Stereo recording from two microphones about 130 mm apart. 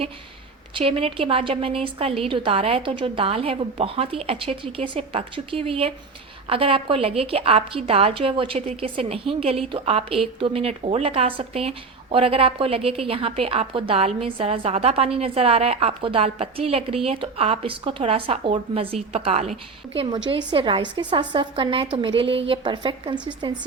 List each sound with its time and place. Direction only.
0.7 s a woman's voice: 45° right (ahead or behind)
19.9 s a woman's voice: 40° right (ahead or behind)